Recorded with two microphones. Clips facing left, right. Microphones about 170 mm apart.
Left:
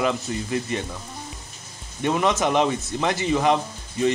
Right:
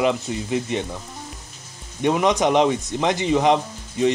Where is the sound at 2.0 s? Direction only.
15° right (ahead or behind).